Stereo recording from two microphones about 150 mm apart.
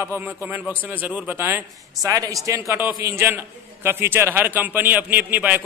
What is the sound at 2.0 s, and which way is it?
A man's voice, 25° right (ahead or behind).